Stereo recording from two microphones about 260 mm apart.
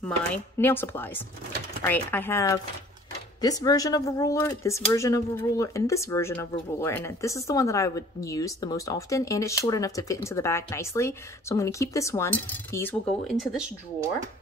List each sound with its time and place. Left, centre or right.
0.6 s speech: centre